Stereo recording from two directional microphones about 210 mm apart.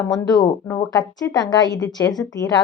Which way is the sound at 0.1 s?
15° left (ahead or behind).